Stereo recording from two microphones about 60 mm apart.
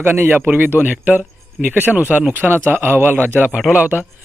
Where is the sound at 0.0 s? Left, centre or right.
Right.